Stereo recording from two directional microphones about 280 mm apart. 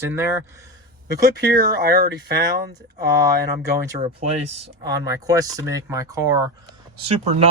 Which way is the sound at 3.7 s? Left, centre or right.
Right.